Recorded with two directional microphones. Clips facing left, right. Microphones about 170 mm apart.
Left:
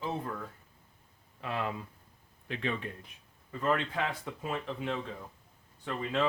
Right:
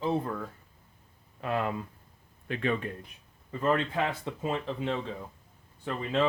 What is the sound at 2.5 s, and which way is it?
Speech, 50° right (ahead or behind).